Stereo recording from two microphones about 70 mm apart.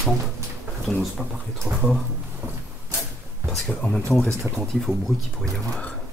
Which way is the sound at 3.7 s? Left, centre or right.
Centre.